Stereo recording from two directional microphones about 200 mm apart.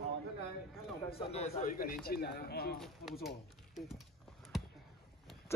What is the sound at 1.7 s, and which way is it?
Speech, 50° left (ahead or behind).